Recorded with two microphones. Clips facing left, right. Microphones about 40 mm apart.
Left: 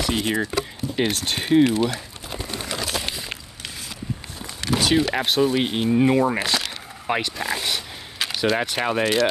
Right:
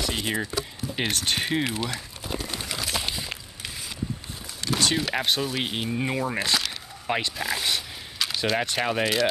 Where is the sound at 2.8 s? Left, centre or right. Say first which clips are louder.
Left 2 dB; centre.